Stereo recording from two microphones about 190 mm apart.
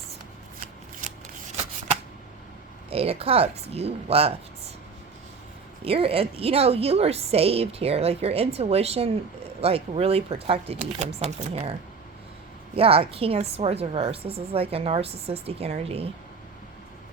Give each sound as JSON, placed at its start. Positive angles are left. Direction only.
{"t": 2.9, "sound": "a woman's voice", "side_deg": -30}
{"t": 5.8, "sound": "a woman's voice", "side_deg": -30}